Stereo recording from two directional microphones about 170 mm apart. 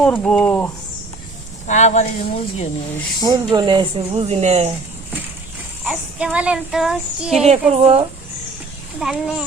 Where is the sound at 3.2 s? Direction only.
25° right (ahead or behind).